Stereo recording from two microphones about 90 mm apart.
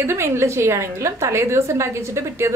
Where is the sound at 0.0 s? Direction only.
30° right (ahead or behind).